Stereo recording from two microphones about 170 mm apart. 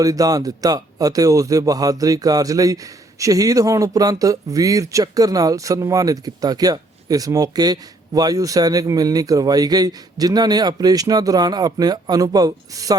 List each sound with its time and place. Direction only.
0.0 s a man's voice: 20° right (ahead or behind)